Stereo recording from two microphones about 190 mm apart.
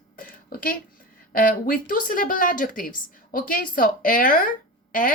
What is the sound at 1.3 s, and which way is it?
Speech, 50° left (ahead or behind).